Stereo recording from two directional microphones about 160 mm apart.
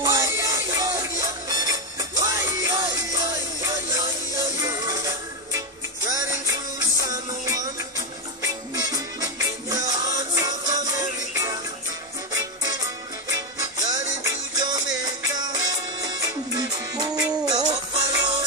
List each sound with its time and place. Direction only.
0.0 s music: 20° right (ahead or behind)
7.0 s music: 25° right (ahead or behind)
8.7 s music: 20° right (ahead or behind)